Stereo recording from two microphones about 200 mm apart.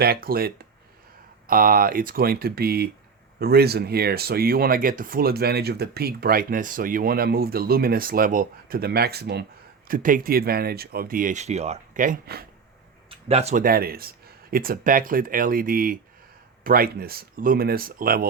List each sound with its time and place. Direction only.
0.0 s speech: 50° right (ahead or behind)
9.9 s speech: 45° right (ahead or behind)
13.1 s speech: 30° right (ahead or behind); by 18.3 s 45° right (ahead or behind)